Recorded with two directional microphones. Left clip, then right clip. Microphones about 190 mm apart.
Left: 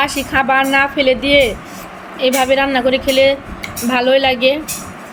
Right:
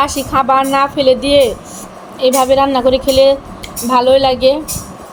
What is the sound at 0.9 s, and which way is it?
Speech, 50° right (ahead or behind).